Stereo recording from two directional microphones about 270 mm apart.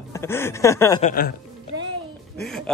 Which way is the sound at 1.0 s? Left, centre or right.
Left.